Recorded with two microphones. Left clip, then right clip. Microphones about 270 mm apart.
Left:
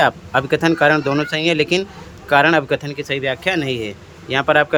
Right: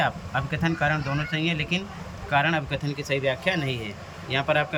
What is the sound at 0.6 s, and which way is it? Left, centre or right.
Speech, centre.